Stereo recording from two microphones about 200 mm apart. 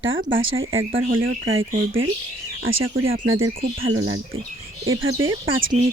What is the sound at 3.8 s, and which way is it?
Speech, 90° right.